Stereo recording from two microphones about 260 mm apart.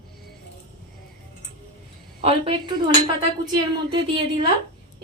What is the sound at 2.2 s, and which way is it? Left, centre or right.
Speech, right.